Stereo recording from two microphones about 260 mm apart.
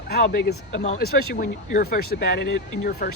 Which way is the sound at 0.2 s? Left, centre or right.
Left.